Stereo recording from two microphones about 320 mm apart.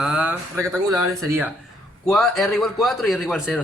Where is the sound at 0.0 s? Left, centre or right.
Centre.